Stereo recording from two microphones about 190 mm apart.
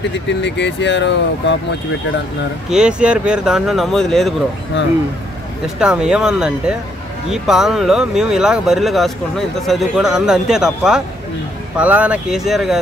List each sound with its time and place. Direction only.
0.3 s speech: 65° left (ahead or behind)
2.7 s speech: 5° right (ahead or behind)
5.8 s speech: 5° right (ahead or behind)